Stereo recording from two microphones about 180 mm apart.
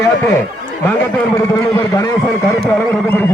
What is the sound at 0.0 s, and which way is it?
A man's voice, 15° left (ahead or behind).